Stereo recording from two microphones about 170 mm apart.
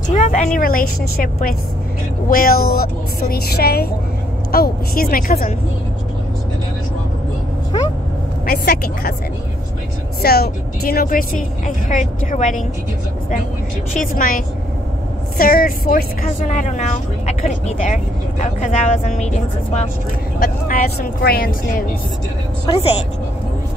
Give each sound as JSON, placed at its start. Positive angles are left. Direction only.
{"t": 0.1, "sound": "a woman's voice", "side_deg": 45}
{"t": 8.5, "sound": "speech", "side_deg": 60}
{"t": 10.2, "sound": "a woman's voice", "side_deg": 65}
{"t": 14.1, "sound": "a woman's voice", "side_deg": 55}
{"t": 20.3, "sound": "speech", "side_deg": 60}
{"t": 22.7, "sound": "speech", "side_deg": 25}